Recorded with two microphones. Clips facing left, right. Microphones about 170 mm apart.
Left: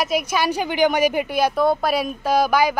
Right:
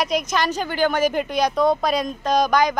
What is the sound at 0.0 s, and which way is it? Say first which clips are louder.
A woman's voice: left 1 dB; 5° left (ahead or behind).